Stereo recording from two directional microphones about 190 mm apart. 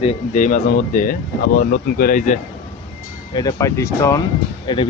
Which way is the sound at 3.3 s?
20° left (ahead or behind).